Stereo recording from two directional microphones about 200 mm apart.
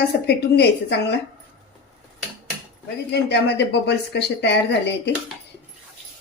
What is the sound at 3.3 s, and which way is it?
A woman's voice, 55° left (ahead or behind).